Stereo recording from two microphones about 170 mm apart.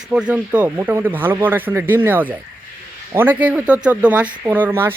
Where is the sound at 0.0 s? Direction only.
5° right (ahead or behind).